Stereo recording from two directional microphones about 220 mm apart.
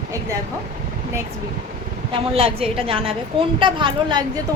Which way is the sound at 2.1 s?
25° right (ahead or behind).